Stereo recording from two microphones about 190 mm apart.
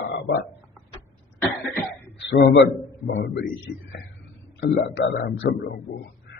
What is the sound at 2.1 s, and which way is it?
Speech, 65° left (ahead or behind).